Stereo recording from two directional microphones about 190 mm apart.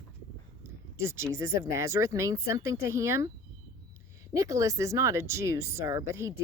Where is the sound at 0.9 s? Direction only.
15° right (ahead or behind).